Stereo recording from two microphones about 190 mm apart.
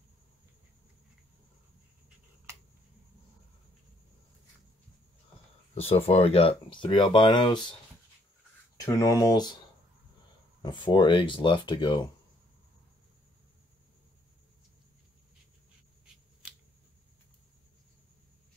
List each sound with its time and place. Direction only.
5.8 s speech: 30° left (ahead or behind)
8.7 s speech: 15° left (ahead or behind)
10.6 s speech: 25° left (ahead or behind)